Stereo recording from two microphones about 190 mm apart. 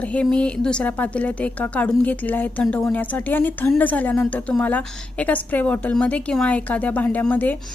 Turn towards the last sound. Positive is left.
turn(degrees=10)  # may be behind; listen again after turning